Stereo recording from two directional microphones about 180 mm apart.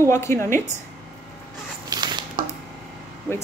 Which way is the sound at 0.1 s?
15° left (ahead or behind).